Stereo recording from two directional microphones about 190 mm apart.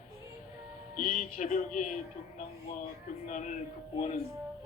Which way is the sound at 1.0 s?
45° left (ahead or behind).